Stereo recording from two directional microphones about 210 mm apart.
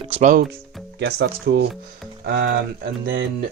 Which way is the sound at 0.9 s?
50° right (ahead or behind).